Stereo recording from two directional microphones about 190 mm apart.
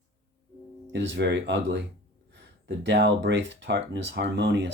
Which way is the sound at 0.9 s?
70° right (ahead or behind).